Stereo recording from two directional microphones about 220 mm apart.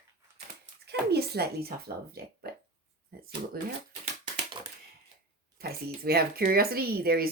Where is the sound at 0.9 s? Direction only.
45° right (ahead or behind).